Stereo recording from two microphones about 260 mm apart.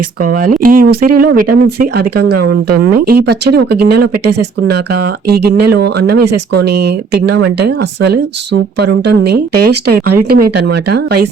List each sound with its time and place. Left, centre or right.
0.4 s speech: right
2.5 s speech: right
3.1 s speech: right
3.9 s speech: right
5.3 s speech: right
9.3 s speech: right